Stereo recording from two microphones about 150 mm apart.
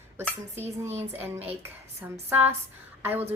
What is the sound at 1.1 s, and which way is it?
Speech, 15° right (ahead or behind).